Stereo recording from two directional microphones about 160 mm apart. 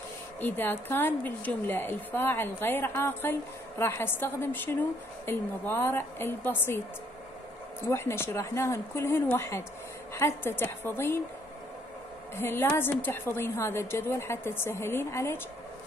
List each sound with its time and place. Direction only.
0.4 s a woman's voice: 10° left (ahead or behind)
7.8 s a woman's voice: 15° left (ahead or behind)
12.4 s a woman's voice: 15° left (ahead or behind)